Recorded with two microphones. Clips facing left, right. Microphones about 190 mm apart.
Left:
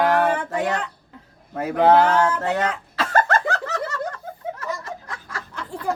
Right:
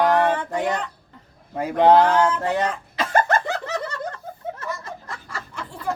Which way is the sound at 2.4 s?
15° right (ahead or behind).